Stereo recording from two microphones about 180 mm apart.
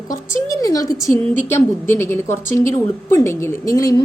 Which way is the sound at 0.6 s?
20° left (ahead or behind).